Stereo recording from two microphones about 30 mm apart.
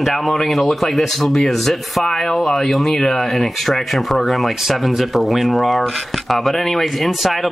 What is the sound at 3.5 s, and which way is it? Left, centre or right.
Speech, centre.